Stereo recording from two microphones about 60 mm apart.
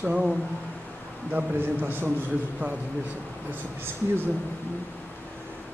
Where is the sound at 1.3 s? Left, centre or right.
Right.